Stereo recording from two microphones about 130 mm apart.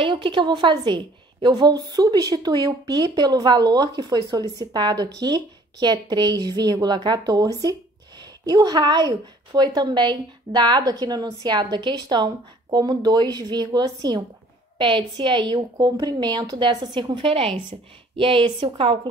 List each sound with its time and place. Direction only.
0.0 s a woman's voice: 40° right (ahead or behind)